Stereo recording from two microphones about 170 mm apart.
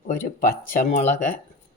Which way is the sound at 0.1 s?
55° left (ahead or behind).